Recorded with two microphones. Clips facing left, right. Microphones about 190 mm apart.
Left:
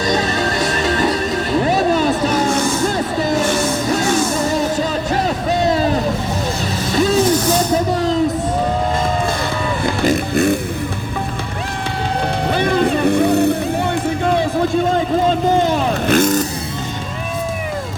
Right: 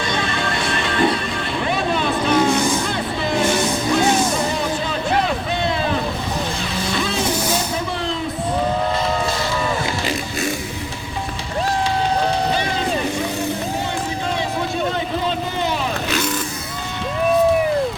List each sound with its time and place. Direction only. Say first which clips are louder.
0.1 s music: left 6 dB; 40° left (ahead or behind)
1.5 s vehicle: left 6 dB; 40° left (ahead or behind)
5.1 s a sound: left 2 dB; 40° left (ahead or behind)
6.9 s music: left 10 dB; 40° left (ahead or behind)
9.8 s music: left 7 dB; 50° left (ahead or behind)
12.5 s vehicle: left 6 dB; 55° left (ahead or behind)
15.3 s vehicle: left 8 dB; 45° left (ahead or behind)